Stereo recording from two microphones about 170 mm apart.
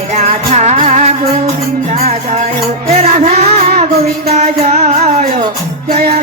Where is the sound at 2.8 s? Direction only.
45° right (ahead or behind).